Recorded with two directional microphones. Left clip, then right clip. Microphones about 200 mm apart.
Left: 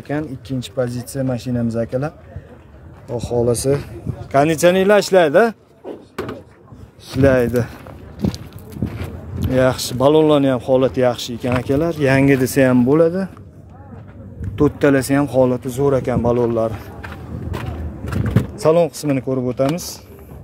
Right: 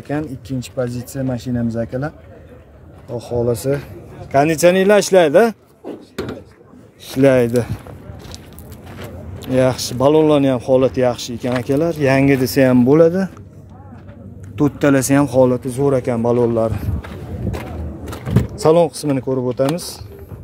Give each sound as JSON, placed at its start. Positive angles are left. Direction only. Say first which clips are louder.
{"t": 0.1, "sound": "speech", "louder": "even", "side_deg": 0}
{"t": 4.3, "sound": "speech", "louder": "right 1 dB", "side_deg": 0}
{"t": 7.2, "sound": "speech", "louder": "right 2 dB", "side_deg": -15}
{"t": 9.0, "sound": "speech", "louder": "left 2 dB", "side_deg": -5}
{"t": 12.8, "sound": "speech", "louder": "right 3 dB", "side_deg": -10}
{"t": 14.6, "sound": "speech", "louder": "even", "side_deg": -5}
{"t": 18.6, "sound": "speech", "louder": "right 2 dB", "side_deg": -10}
{"t": 18.9, "sound": "speech", "louder": "right 1 dB", "side_deg": 0}